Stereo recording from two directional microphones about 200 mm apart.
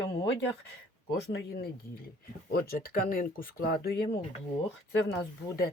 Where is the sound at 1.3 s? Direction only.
50° left (ahead or behind).